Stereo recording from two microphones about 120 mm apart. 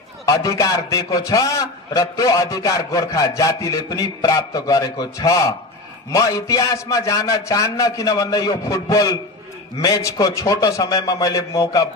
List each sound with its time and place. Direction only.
0.2 s a man's voice: 30° left (ahead or behind)